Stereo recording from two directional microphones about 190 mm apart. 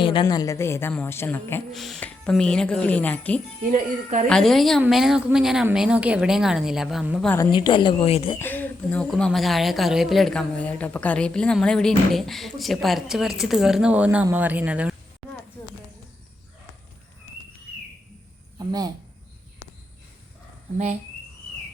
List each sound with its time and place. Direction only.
0.0 s a woman's voice: 25° left (ahead or behind); by 1.6 s 10° left (ahead or behind)
1.7 s speech: centre (ahead or behind)
3.7 s speech: 40° right (ahead or behind)
4.3 s speech: centre (ahead or behind)
7.5 s speech: 25° left (ahead or behind)
8.4 s speech: 10° left (ahead or behind); by 14.9 s 5° right (ahead or behind)